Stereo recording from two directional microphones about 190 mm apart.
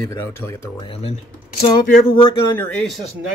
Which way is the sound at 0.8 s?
30° left (ahead or behind).